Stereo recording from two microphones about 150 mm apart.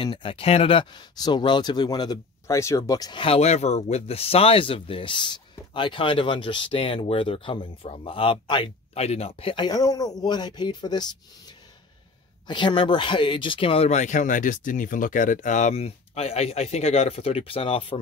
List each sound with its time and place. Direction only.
0.0 s speech: 35° left (ahead or behind)
8.9 s a man's voice: 45° left (ahead or behind)